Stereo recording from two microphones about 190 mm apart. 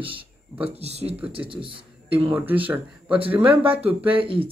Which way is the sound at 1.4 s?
25° right (ahead or behind).